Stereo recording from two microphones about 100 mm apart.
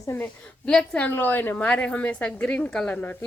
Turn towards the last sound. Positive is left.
turn(degrees=10)  # may be behind; listen again after turning